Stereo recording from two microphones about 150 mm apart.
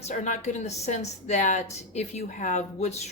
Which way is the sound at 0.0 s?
50° left (ahead or behind).